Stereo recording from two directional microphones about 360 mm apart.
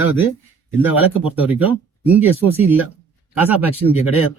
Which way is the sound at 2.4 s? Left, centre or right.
Centre.